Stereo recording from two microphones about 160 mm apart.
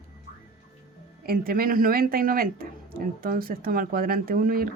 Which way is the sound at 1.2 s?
65° right (ahead or behind).